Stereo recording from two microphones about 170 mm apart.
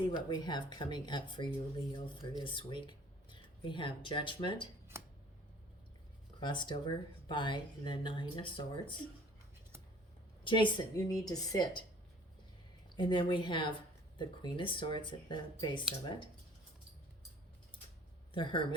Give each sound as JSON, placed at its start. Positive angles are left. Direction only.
{"t": 0.1, "sound": "speech", "side_deg": 25}
{"t": 4.9, "sound": "a sound", "side_deg": -15}
{"t": 6.4, "sound": "speech", "side_deg": 25}
{"t": 10.4, "sound": "speech", "side_deg": 30}
{"t": 13.0, "sound": "speech", "side_deg": 25}